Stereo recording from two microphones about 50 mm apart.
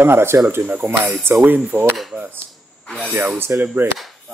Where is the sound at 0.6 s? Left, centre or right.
Right.